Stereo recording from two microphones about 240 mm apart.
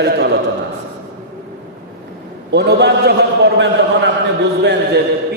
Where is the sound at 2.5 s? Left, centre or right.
Right.